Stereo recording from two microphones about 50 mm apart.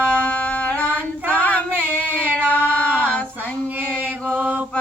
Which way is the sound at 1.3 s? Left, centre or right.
Left.